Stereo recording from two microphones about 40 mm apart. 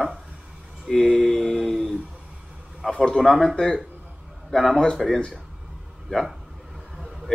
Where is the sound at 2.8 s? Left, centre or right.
Centre.